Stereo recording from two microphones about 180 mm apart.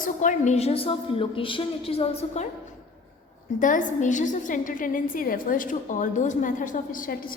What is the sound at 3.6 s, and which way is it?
A woman's voice, 45° left (ahead or behind).